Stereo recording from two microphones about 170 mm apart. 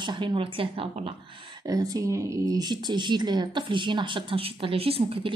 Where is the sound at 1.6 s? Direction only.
20° right (ahead or behind).